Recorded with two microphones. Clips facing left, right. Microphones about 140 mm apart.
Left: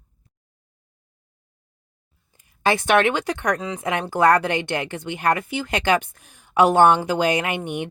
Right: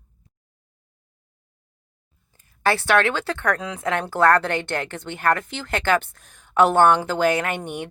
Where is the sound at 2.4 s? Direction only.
15° left (ahead or behind).